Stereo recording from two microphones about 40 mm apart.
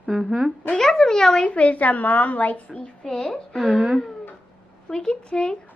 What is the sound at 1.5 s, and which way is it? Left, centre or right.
A woman's voice, left.